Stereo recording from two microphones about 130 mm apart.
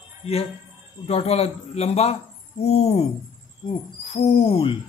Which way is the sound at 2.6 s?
55° left (ahead or behind).